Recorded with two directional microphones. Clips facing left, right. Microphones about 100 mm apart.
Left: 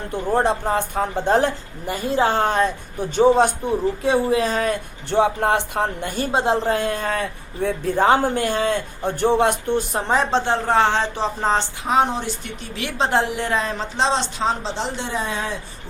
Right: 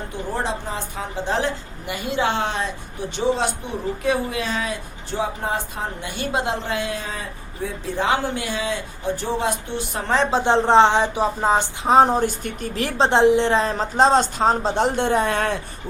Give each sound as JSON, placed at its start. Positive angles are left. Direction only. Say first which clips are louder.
{"t": 0.1, "sound": "a man's voice", "louder": "left 8 dB", "side_deg": 55}
{"t": 4.0, "sound": "speech", "louder": "left 3 dB", "side_deg": 30}
{"t": 5.1, "sound": "speech", "louder": "left 7 dB", "side_deg": 65}
{"t": 6.3, "sound": "a man's voice", "louder": "left 5 dB", "side_deg": 35}
{"t": 10.4, "sound": "a woman's voice", "louder": "right 4 dB", "side_deg": -20}
{"t": 11.9, "sound": "a woman's voice", "louder": "right 5 dB", "side_deg": -40}
{"t": 13.1, "sound": "a woman's voice", "louder": "right 6 dB", "side_deg": -20}